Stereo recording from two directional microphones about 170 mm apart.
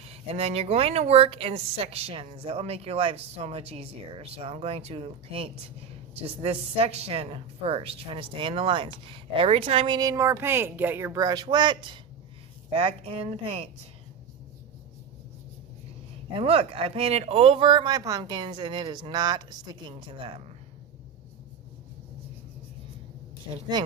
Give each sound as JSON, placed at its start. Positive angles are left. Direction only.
{"t": 0.0, "sound": "a woman's voice", "side_deg": -35}
{"t": 16.3, "sound": "a woman's voice", "side_deg": -35}